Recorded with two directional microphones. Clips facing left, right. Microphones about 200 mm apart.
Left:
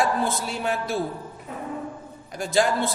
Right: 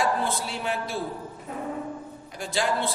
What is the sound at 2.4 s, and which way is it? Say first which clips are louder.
Speech: left 5 dB; 45° left (ahead or behind).